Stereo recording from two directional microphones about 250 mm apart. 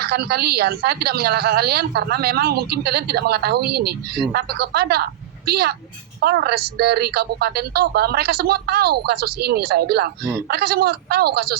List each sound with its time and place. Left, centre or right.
0.0 s a woman's voice: right